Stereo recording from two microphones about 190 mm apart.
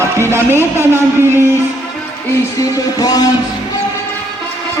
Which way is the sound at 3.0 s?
20° left (ahead or behind).